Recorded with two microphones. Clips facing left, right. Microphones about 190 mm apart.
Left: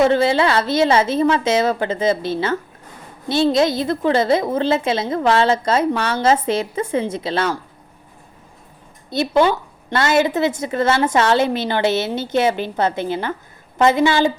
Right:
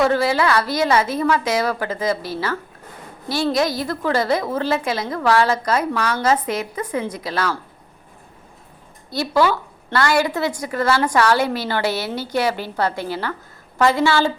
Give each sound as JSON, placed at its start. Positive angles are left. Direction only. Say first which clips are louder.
{"t": 0.0, "sound": "a woman's voice", "louder": "left 3 dB", "side_deg": 25}
{"t": 9.0, "sound": "a woman's voice", "louder": "left 2 dB", "side_deg": 20}